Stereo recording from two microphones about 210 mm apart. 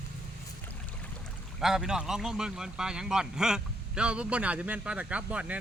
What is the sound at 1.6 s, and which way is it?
A man's voice, centre (ahead or behind).